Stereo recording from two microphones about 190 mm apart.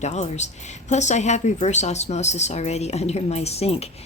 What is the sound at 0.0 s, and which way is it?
A woman's voice, 35° left (ahead or behind).